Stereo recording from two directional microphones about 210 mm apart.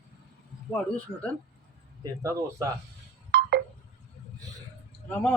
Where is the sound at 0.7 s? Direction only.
5° left (ahead or behind).